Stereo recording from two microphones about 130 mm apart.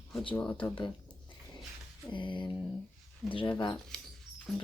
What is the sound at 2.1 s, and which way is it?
Mantra, 40° left (ahead or behind).